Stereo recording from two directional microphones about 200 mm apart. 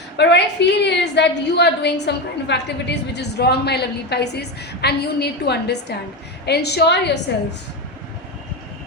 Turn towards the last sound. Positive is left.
turn(degrees=60)  # may be behind; listen again after turning